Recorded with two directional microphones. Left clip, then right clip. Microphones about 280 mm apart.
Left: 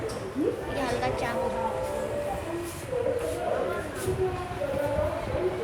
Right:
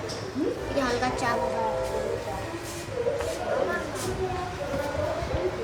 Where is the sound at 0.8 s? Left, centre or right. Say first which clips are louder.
Right 5 dB; centre.